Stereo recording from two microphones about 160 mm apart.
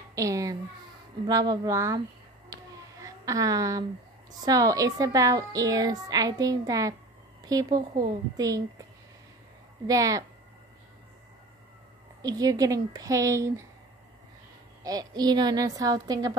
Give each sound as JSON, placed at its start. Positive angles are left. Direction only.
{"t": 0.1, "sound": "a woman's voice", "side_deg": -20}
{"t": 2.5, "sound": "a sound", "side_deg": -20}
{"t": 4.5, "sound": "a woman's voice", "side_deg": -20}
{"t": 9.8, "sound": "a woman's voice", "side_deg": -20}
{"t": 12.2, "sound": "a woman's voice", "side_deg": -25}
{"t": 14.8, "sound": "a woman's voice", "side_deg": -25}